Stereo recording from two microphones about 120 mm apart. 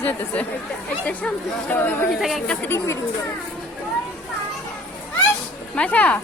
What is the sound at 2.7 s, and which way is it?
Speech, 20° left (ahead or behind).